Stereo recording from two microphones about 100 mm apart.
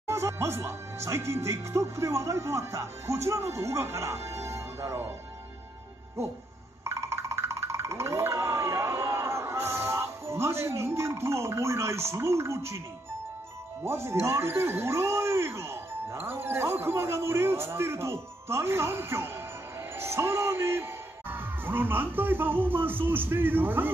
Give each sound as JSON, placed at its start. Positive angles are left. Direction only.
{"t": 0.1, "sound": "speech", "side_deg": -30}
{"t": 6.8, "sound": "music", "side_deg": -30}
{"t": 13.8, "sound": "speech", "side_deg": -25}